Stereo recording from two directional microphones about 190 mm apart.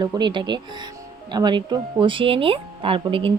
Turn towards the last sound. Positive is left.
turn(degrees=-25)  # may be behind; listen again after turning